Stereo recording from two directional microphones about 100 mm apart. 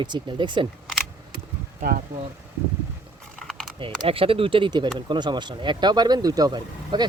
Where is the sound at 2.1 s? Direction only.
45° right (ahead or behind).